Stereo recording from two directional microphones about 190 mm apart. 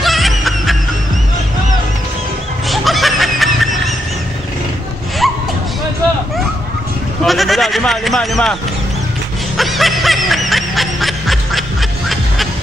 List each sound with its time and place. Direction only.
0.0 s music: centre (ahead or behind)
2.7 s snicker: centre (ahead or behind)
5.2 s a sound: centre (ahead or behind)
7.2 s sheep: centre (ahead or behind)
9.6 s snicker: centre (ahead or behind)